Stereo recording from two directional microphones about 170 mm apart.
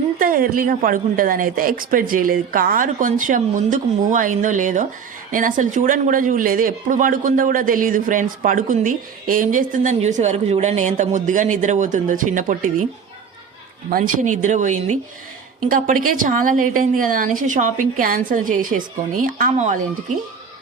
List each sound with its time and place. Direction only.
0.2 s speech: 55° right (ahead or behind)
13.9 s speech: 50° right (ahead or behind)